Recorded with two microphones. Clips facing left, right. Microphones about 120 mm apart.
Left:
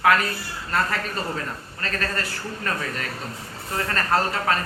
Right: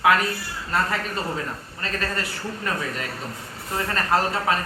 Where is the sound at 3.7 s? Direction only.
15° right (ahead or behind).